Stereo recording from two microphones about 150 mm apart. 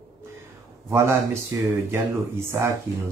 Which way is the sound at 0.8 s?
15° right (ahead or behind).